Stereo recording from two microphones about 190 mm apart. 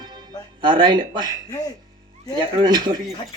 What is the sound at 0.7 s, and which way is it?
Speech, 25° right (ahead or behind).